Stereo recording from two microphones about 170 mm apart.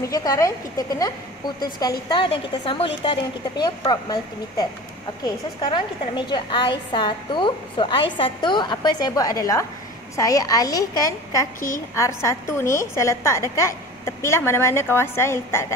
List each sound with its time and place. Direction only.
0.0 s a woman's voice: 20° left (ahead or behind)